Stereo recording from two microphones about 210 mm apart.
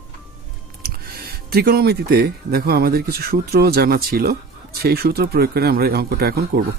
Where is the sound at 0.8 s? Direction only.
45° right (ahead or behind).